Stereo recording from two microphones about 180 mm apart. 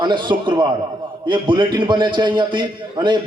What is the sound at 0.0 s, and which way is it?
A man's voice, 25° right (ahead or behind).